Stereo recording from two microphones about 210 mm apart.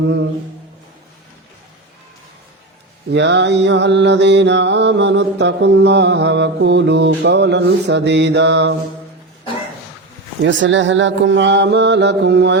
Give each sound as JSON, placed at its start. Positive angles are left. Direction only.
{"t": 3.1, "sound": "mantra", "side_deg": -55}
{"t": 10.4, "sound": "mantra", "side_deg": -60}